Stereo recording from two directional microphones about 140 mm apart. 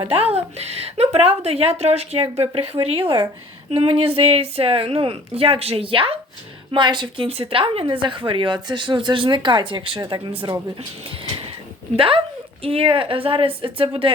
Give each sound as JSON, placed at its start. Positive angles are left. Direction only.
{"t": 0.1, "sound": "a woman's voice", "side_deg": -45}
{"t": 11.9, "sound": "a woman's voice", "side_deg": -40}